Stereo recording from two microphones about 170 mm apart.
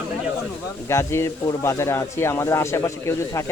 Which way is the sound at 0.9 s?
15° left (ahead or behind).